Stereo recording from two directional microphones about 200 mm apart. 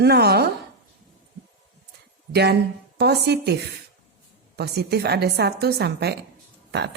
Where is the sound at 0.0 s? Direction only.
55° right (ahead or behind).